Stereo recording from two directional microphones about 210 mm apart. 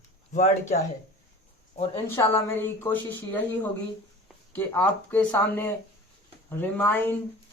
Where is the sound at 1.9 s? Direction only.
10° left (ahead or behind).